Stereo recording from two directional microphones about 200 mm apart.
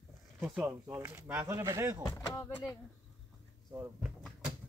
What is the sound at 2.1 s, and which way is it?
Speech, 15° left (ahead or behind).